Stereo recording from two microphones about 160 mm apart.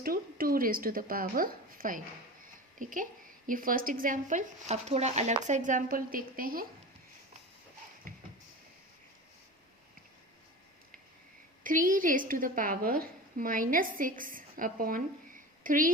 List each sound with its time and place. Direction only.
0.0 s a woman's voice: 65° right (ahead or behind)
8.1 s a sound: 60° right (ahead or behind)
11.6 s a woman's voice: 55° right (ahead or behind)